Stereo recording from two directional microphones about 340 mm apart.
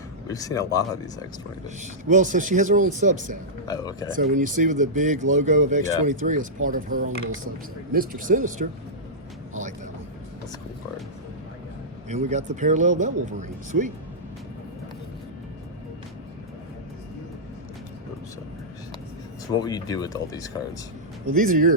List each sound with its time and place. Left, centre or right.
0.3 s speech: centre
1.8 s speech: right
3.7 s speech: centre
4.1 s speech: right
12.0 s speech: centre
19.5 s speech: centre
21.3 s speech: right